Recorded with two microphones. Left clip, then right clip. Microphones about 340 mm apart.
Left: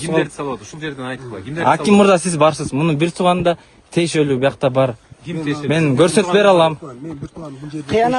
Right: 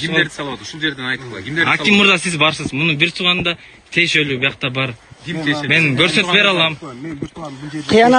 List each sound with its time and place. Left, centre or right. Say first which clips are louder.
0.2 s a man's voice: right 3 dB; left
1.6 s a man's voice: even; centre
7.9 s a man's voice: right 4 dB; right